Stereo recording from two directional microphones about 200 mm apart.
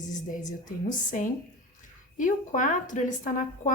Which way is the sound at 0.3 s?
40° left (ahead or behind).